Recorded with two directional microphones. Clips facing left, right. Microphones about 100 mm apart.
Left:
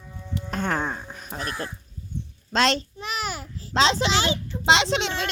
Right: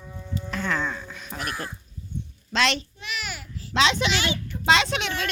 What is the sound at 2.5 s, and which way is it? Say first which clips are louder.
A child's voice: left 2 dB; 40° left (ahead or behind).